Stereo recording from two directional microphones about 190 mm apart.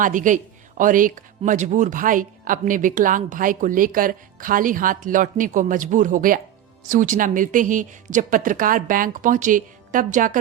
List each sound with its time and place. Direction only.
0.0 s speech: 45° right (ahead or behind)